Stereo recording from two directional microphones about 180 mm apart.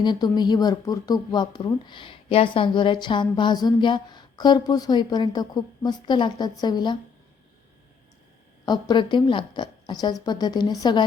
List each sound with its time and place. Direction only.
0.0 s speech: 25° left (ahead or behind)
8.6 s speech: 25° left (ahead or behind)